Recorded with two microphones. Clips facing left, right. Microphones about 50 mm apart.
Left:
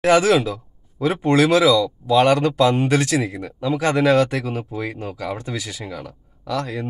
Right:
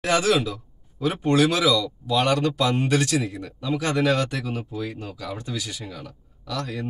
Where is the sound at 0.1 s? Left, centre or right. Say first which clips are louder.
Left 5 dB; left.